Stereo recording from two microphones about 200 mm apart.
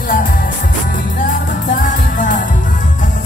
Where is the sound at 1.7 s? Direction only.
40° left (ahead or behind).